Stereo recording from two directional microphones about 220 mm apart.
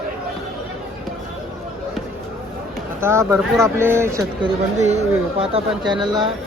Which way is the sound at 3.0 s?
10° right (ahead or behind).